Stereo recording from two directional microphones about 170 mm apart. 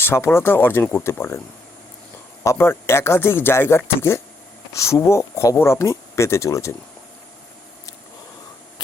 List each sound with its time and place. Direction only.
0.0 s speech: 15° left (ahead or behind)
2.4 s speech: 15° left (ahead or behind)